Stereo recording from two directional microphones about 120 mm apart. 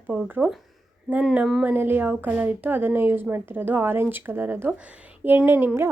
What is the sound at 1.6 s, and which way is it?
Speech, 15° right (ahead or behind).